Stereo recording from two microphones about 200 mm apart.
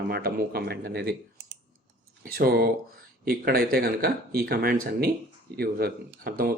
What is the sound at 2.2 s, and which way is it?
Speech, 50° right (ahead or behind).